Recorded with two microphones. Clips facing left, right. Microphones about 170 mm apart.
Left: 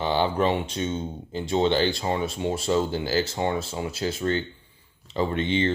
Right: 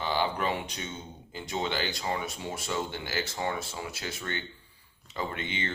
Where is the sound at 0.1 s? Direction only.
30° left (ahead or behind).